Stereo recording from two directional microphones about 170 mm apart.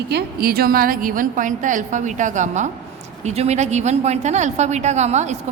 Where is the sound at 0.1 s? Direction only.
65° right (ahead or behind).